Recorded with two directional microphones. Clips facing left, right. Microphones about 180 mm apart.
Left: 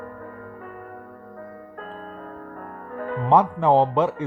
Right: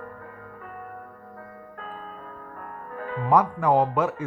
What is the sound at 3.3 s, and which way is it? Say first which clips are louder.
Speech: left 3 dB; 30° left (ahead or behind).